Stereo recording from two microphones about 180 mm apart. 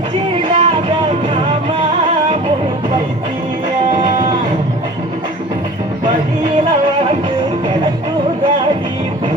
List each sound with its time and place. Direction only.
0.4 s music: 30° right (ahead or behind)